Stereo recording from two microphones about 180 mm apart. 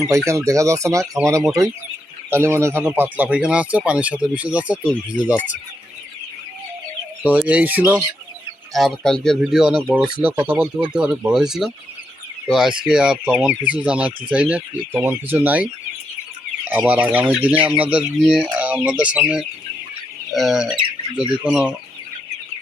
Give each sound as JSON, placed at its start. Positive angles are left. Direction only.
{"t": 0.3, "sound": "speech", "side_deg": -15}
{"t": 7.2, "sound": "speech", "side_deg": -10}
{"t": 8.7, "sound": "speech", "side_deg": 0}